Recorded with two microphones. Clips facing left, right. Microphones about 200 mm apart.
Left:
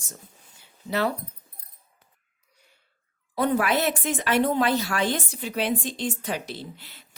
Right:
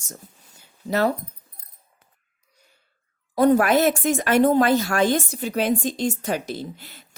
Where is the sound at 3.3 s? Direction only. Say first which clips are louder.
Right 6 dB; 45° right (ahead or behind).